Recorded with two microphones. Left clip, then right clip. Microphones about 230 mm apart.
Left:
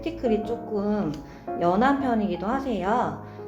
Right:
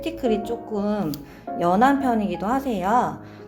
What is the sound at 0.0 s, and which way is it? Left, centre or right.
Speech, right.